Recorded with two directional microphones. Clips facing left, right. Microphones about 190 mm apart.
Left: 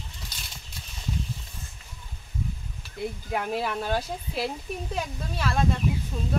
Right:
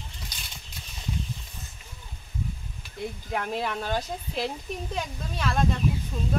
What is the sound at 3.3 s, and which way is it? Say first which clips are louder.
Speech: left 1 dB; 5° left (ahead or behind).